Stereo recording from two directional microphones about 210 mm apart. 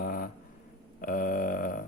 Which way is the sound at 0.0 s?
45° left (ahead or behind).